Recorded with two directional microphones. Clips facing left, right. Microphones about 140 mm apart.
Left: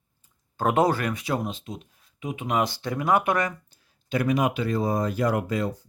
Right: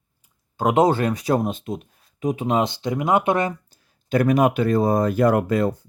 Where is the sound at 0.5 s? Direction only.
15° right (ahead or behind); by 1.8 s 55° right (ahead or behind).